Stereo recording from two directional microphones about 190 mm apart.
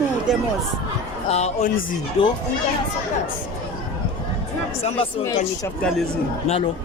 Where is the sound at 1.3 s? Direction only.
35° left (ahead or behind).